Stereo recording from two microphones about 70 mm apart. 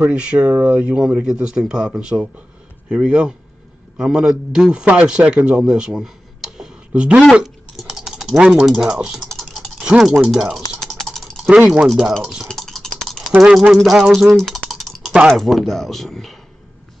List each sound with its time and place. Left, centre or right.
0.0 s a man's voice: centre
5.7 s a sound: centre
7.4 s typing: centre
8.6 s speech: centre
9.3 s typing: centre
9.8 s typing: centre
11.8 s speech: centre
12.4 s stir: centre
13.4 s speech: centre
14.7 s typing: centre
15.2 s speech: centre